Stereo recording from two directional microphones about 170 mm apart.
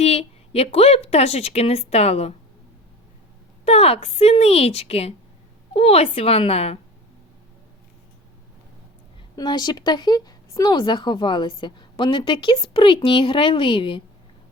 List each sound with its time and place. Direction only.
0.0 s a woman's voice: 35° left (ahead or behind)
3.7 s a woman's voice: 35° left (ahead or behind)
9.3 s speech: 25° left (ahead or behind)